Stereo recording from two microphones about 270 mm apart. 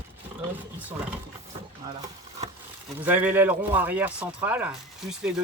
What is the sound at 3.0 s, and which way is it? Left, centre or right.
Speech, centre.